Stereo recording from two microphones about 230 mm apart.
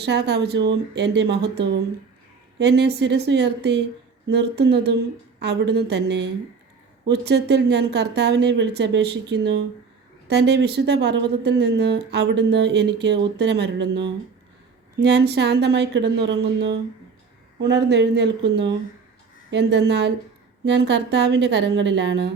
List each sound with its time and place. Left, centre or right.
0.0 s speech: right
15.0 s speech: right